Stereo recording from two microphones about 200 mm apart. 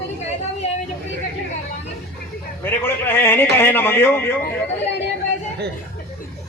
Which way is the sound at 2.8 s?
10° left (ahead or behind).